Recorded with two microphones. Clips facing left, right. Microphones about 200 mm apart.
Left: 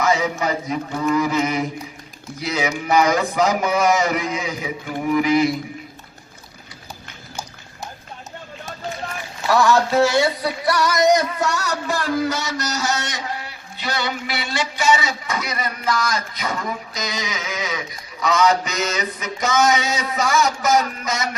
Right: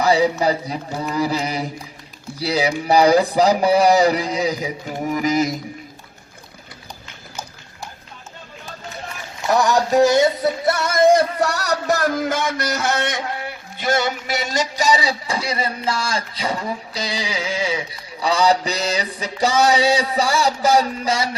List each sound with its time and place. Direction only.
0.0 s music: 35° right (ahead or behind)
9.5 s music: 15° right (ahead or behind)